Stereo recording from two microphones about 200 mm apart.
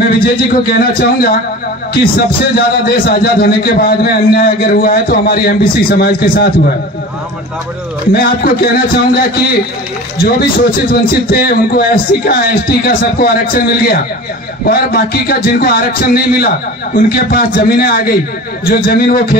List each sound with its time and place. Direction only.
0.2 s a man's voice: 50° left (ahead or behind)
8.1 s a man's voice: 50° left (ahead or behind)